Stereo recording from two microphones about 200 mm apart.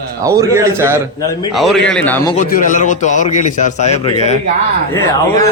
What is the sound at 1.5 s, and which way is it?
Speech, centre (ahead or behind).